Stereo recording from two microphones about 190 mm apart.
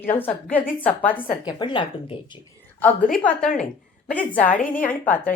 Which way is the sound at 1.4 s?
25° left (ahead or behind).